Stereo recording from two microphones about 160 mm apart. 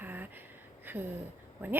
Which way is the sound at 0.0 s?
10° right (ahead or behind).